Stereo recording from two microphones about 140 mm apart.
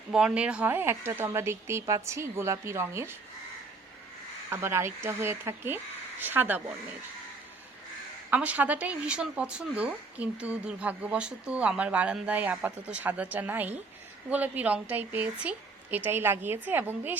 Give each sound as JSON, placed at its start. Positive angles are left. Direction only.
{"t": 0.1, "sound": "a woman's voice", "side_deg": -5}
{"t": 4.4, "sound": "a woman's voice", "side_deg": -20}
{"t": 8.3, "sound": "a woman's voice", "side_deg": -10}